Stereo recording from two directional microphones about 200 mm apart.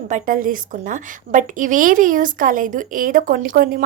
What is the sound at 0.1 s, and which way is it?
A woman's voice, 45° right (ahead or behind).